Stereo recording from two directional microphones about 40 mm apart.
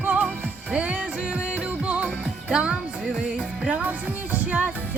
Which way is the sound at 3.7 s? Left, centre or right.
Right.